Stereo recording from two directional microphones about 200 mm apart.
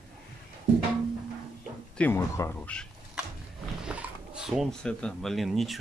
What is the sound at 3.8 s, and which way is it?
Speech, 5° right (ahead or behind).